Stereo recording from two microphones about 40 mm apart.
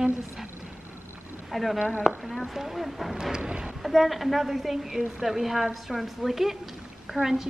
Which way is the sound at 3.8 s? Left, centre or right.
Centre.